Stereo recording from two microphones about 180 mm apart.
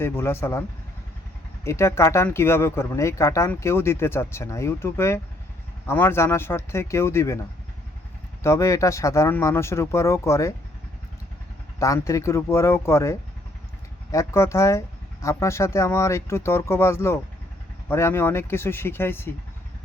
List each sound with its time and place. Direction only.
0.0 s speech: 15° left (ahead or behind)
1.6 s speech: 15° left (ahead or behind)
8.4 s speech: 15° left (ahead or behind)
11.8 s speech: 15° left (ahead or behind)